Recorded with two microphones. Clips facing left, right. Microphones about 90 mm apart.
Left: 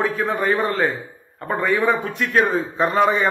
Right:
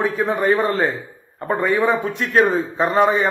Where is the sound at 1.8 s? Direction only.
20° right (ahead or behind).